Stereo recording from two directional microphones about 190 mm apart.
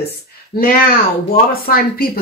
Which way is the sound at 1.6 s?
50° left (ahead or behind).